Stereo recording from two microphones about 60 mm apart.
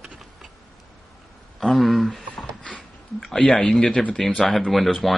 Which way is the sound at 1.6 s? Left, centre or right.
Centre.